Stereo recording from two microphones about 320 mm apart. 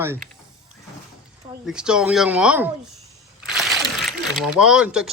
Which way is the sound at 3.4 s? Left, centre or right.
Centre.